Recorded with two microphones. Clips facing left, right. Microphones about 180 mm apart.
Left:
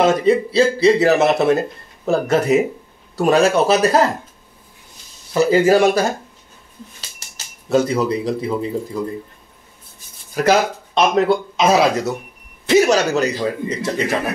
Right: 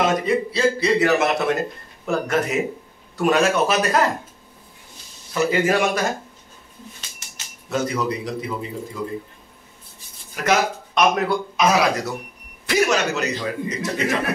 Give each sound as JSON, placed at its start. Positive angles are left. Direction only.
{"t": 0.0, "sound": "speech", "side_deg": 30}
{"t": 5.3, "sound": "speech", "side_deg": 35}
{"t": 7.7, "sound": "speech", "side_deg": 30}
{"t": 10.3, "sound": "speech", "side_deg": 30}
{"t": 12.6, "sound": "a sound", "side_deg": 25}
{"t": 12.9, "sound": "speech", "side_deg": 35}